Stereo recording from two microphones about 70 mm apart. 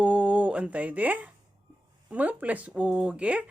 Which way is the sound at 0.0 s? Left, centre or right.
Centre.